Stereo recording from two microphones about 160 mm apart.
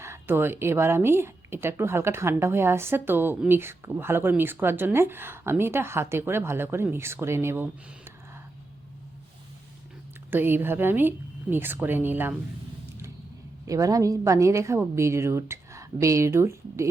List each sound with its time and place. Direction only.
0.0 s speech: 15° right (ahead or behind)
10.3 s speech: 15° right (ahead or behind)
13.7 s a woman's voice: 20° right (ahead or behind)